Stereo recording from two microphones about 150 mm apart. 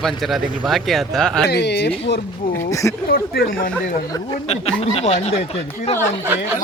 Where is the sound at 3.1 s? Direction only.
85° left.